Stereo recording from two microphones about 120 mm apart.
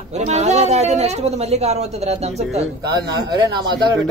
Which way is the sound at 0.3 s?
70° right (ahead or behind).